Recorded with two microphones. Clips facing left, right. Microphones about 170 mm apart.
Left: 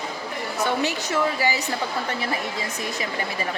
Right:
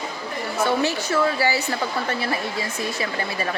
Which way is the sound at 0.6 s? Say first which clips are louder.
Right 3 dB; 15° left (ahead or behind).